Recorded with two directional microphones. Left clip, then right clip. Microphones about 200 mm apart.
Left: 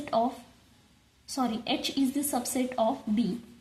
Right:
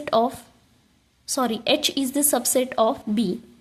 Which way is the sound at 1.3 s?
50° right (ahead or behind).